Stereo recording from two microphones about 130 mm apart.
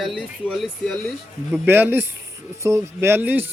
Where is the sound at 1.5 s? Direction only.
15° right (ahead or behind).